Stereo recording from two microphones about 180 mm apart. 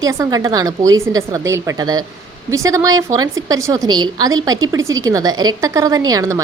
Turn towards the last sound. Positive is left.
turn(degrees=-20)  # may be behind; listen again after turning